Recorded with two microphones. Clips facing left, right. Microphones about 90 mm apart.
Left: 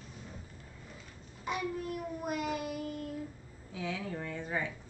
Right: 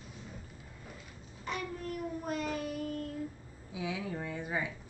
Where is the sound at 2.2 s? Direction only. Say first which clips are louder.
Left 2 dB; 10° left (ahead or behind).